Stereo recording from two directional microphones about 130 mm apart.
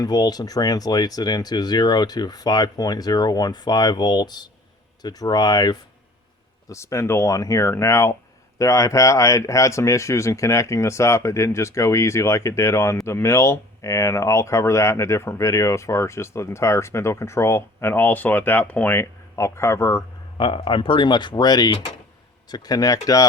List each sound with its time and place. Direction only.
0.0 s speech: 30° left (ahead or behind)
20.4 s speech: 40° left (ahead or behind)